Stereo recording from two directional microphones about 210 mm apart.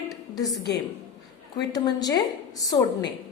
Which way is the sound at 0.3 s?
15° left (ahead or behind).